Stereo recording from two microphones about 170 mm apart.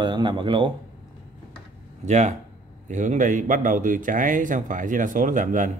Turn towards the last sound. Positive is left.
turn(degrees=-50)  # may be behind; listen again after turning